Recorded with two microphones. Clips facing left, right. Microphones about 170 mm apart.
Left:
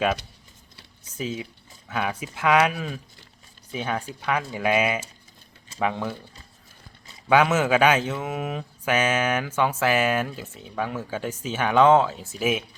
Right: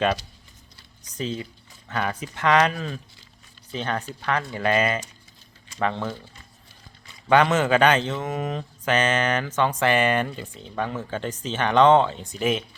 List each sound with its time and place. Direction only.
1.1 s speech: 5° left (ahead or behind)
7.3 s speech: 5° left (ahead or behind)